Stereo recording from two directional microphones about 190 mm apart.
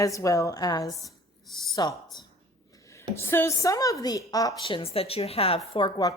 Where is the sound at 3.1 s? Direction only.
10° left (ahead or behind).